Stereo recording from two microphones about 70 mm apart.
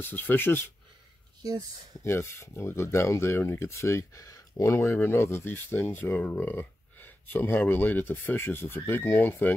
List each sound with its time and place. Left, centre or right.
0.0 s speech: left
2.0 s speech: left